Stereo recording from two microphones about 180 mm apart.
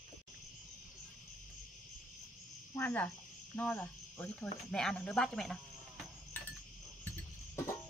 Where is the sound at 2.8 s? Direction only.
10° left (ahead or behind).